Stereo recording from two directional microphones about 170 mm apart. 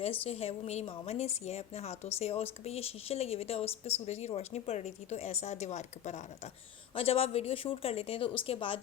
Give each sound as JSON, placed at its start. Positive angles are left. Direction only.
{"t": 0.3, "sound": "a woman's voice", "side_deg": 40}